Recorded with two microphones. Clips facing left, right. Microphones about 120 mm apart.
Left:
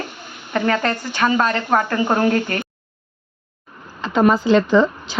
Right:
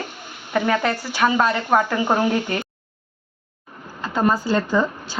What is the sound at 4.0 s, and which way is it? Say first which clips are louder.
Speech: left 4 dB; 90° left.